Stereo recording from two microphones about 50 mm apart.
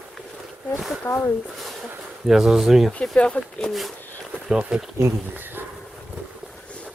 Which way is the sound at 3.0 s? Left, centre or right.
Left.